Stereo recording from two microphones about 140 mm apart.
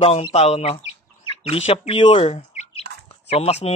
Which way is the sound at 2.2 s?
50° left (ahead or behind).